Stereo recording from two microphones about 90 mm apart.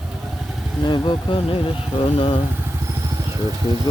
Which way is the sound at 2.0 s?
90° left.